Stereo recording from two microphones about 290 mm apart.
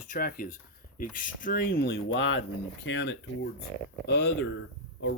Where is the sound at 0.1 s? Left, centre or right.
Left.